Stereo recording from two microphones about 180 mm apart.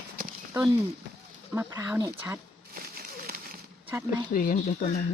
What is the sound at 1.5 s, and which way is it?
Speech, 15° right (ahead or behind).